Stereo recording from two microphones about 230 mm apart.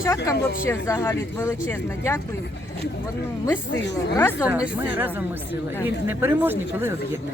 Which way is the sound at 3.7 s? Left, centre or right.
Left.